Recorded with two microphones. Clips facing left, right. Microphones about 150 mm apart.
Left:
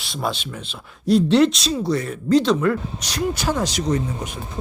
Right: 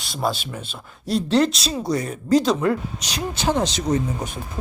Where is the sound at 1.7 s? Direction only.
15° right (ahead or behind).